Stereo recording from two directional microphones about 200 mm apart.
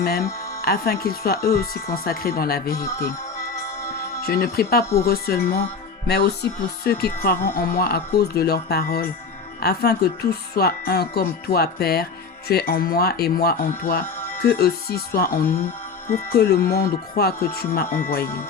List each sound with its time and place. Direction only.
0.0 s speech: 50° left (ahead or behind)
2.7 s music: 15° left (ahead or behind)
4.2 s speech: 50° left (ahead or behind)